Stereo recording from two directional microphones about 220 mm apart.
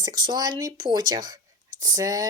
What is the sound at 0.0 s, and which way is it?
A woman's voice, 20° right (ahead or behind).